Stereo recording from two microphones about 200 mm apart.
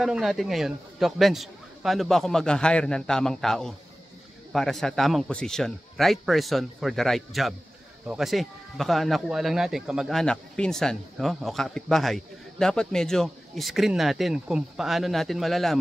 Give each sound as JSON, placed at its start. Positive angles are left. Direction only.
{"t": 0.0, "sound": "speech", "side_deg": 0}